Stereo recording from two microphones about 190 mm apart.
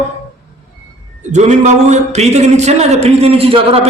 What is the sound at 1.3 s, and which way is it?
Speech, 35° right (ahead or behind).